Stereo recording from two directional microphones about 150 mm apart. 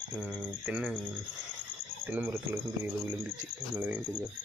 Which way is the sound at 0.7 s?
10° right (ahead or behind).